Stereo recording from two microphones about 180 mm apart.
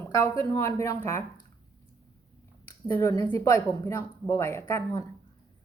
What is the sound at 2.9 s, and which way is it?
Speech, 15° left (ahead or behind).